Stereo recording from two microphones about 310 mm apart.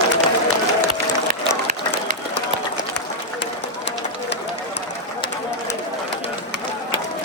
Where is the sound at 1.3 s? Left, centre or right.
Right.